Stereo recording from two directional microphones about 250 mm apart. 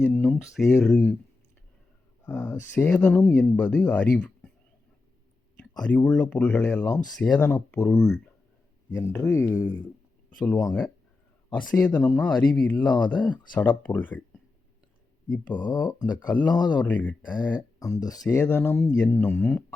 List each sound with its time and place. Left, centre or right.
0.0 s speech: centre
2.2 s speech: centre
5.5 s speech: centre
15.4 s speech: centre
16.8 s speech: centre